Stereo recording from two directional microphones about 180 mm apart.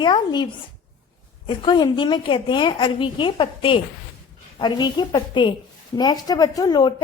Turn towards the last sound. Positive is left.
turn(degrees=20)  # may be behind; listen again after turning